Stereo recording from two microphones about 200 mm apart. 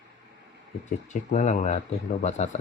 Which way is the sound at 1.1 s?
35° left (ahead or behind).